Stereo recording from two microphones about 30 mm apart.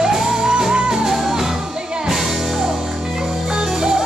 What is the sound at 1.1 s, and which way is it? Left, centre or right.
Music, centre.